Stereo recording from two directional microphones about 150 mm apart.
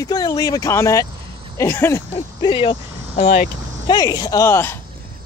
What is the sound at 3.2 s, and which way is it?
Speech, 60° left (ahead or behind).